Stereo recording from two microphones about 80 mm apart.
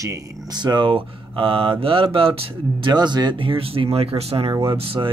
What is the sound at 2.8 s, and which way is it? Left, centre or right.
Speech, right.